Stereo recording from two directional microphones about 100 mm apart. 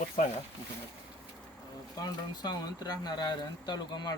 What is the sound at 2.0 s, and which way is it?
Speech, 45° left (ahead or behind).